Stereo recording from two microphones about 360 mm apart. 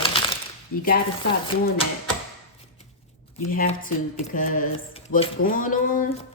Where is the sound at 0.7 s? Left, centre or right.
Left.